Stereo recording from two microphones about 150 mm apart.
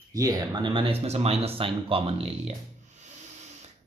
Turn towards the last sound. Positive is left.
turn(degrees=-50)  # may be behind; listen again after turning